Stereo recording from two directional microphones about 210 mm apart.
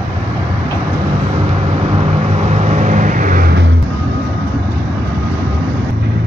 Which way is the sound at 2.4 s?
35° right (ahead or behind).